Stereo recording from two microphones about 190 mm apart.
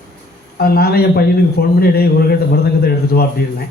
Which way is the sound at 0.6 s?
55° left (ahead or behind).